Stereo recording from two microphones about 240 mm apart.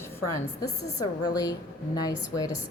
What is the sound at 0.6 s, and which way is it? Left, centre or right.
A woman's voice, centre.